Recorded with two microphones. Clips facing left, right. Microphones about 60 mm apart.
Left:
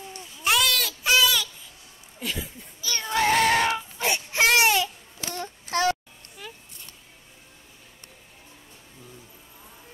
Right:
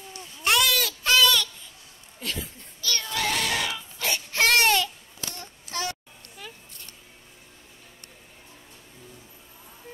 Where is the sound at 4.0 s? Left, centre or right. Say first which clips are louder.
Left 1 dB; centre.